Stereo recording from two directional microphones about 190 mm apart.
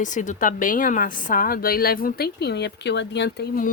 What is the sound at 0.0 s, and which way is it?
Speech, 40° left (ahead or behind).